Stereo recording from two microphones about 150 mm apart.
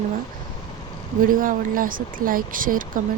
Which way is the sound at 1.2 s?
65° right (ahead or behind).